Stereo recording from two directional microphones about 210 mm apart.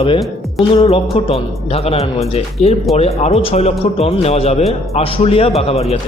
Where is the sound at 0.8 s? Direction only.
25° left (ahead or behind).